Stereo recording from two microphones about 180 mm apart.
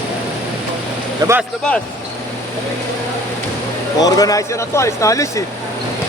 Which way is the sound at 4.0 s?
20° left (ahead or behind).